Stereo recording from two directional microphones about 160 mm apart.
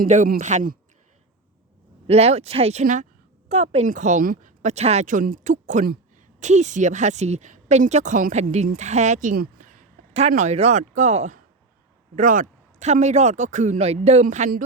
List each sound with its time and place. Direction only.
0.0 s a woman's voice: 50° right (ahead or behind)
2.0 s a woman's voice: 40° right (ahead or behind)
12.1 s a woman's voice: 55° right (ahead or behind)